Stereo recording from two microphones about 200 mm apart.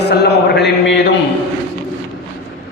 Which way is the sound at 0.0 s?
55° left (ahead or behind).